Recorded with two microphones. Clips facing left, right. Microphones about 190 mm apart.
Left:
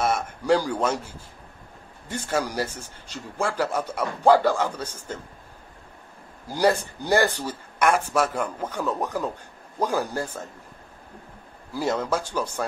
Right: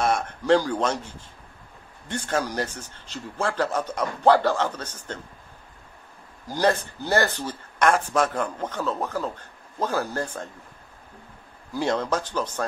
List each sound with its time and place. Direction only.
0.0 s a man's voice: 5° left (ahead or behind)
6.4 s speech: 10° left (ahead or behind)
11.7 s speech: 5° left (ahead or behind)